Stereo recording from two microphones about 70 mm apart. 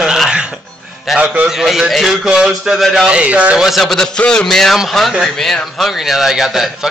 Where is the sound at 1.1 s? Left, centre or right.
Right.